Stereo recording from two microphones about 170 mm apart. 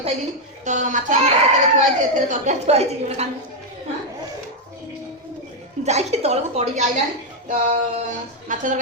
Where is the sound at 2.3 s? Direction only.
40° right (ahead or behind).